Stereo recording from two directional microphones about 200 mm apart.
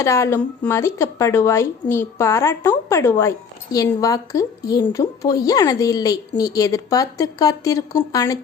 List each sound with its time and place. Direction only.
0.0 s a woman's voice: 15° left (ahead or behind)